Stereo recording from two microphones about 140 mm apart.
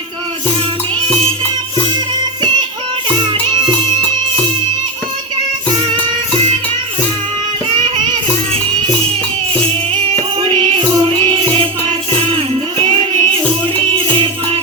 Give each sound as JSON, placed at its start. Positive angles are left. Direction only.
{"t": 7.7, "sound": "music", "side_deg": -35}
{"t": 10.5, "sound": "music", "side_deg": -35}